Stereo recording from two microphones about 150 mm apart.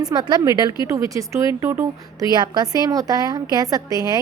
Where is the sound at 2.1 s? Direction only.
25° right (ahead or behind).